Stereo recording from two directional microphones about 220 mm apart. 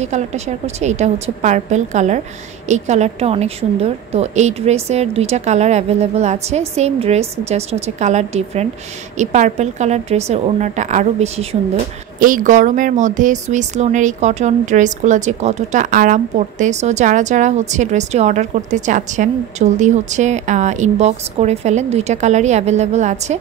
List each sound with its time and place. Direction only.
0.0 s a woman's voice: 30° right (ahead or behind)